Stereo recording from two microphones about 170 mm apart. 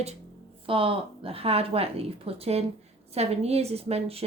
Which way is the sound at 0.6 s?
30° right (ahead or behind).